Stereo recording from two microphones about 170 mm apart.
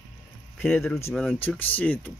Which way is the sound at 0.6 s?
15° left (ahead or behind).